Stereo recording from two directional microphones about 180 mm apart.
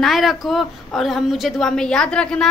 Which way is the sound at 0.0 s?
Centre (ahead or behind).